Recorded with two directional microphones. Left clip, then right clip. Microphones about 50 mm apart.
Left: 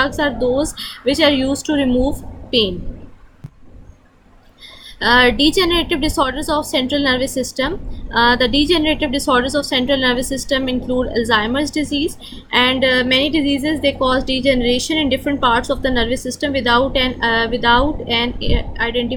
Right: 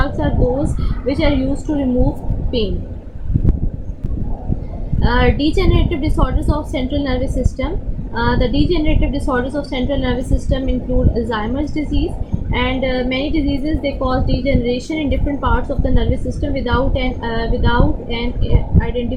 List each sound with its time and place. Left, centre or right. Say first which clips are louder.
0.0 s a woman's voice: left 3 dB; left
4.9 s a woman's voice: left 5 dB; left